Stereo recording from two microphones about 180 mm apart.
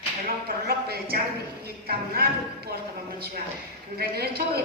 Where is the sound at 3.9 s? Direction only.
60° right (ahead or behind).